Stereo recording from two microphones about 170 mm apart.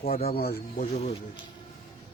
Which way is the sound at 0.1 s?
35° left (ahead or behind).